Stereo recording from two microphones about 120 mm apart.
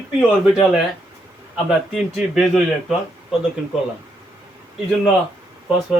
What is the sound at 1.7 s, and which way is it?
A man's voice, centre (ahead or behind).